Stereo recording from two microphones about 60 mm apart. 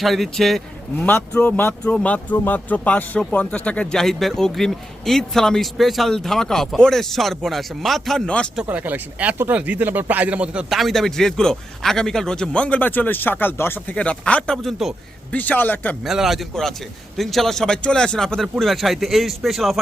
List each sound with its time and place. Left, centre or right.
0.0 s speech: centre
0.9 s speech: left
3.9 s speech: centre
8.7 s speech: right
10.7 s a man's voice: centre; by 13.9 s left
13.9 s speech: left
14.5 s speech: centre
15.3 s speech: left
16.0 s a man's voice: centre
18.6 s speech: centre